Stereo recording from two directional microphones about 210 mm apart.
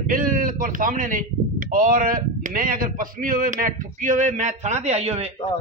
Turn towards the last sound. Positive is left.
turn(degrees=-30)  # may be behind; listen again after turning